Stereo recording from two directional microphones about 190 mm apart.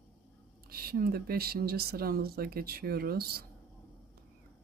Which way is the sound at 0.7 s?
50° right (ahead or behind).